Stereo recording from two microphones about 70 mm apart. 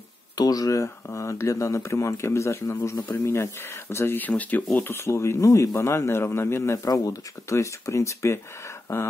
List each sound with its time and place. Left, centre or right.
0.4 s speech: left
0.8 s a man's voice: left
4.2 s a man's voice: left
5.0 s a man's voice: left
6.9 s a man's voice: left